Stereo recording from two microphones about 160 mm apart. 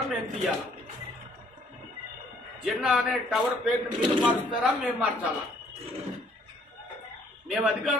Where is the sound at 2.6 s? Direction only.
5° right (ahead or behind).